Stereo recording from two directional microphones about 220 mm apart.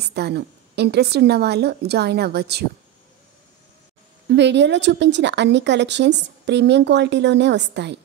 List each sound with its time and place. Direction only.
0.0 s speech: 50° right (ahead or behind)
4.3 s speech: 50° right (ahead or behind)